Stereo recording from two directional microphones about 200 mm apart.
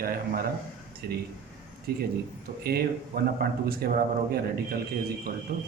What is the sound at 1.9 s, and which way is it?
Speech, 50° right (ahead or behind).